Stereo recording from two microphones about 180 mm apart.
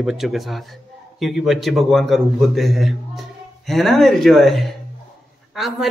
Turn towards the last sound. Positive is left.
turn(degrees=0)  # may be behind; listen again after turning